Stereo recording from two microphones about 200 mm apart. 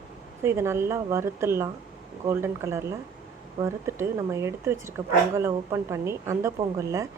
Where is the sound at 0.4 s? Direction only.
15° right (ahead or behind).